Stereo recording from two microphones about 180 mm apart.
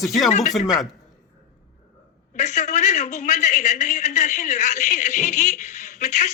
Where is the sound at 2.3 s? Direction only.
40° left (ahead or behind).